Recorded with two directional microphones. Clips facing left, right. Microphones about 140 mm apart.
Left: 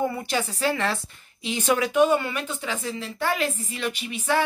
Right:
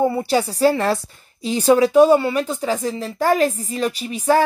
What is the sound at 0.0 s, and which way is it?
A woman's voice, 35° right (ahead or behind).